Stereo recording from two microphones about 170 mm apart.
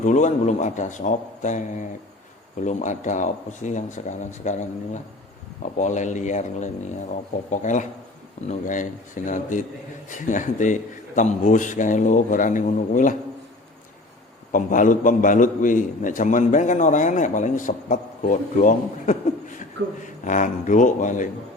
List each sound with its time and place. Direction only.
0.0 s a man's voice: 45° left (ahead or behind)
5.6 s a man's voice: 45° left (ahead or behind)
14.5 s a man's voice: 50° left (ahead or behind)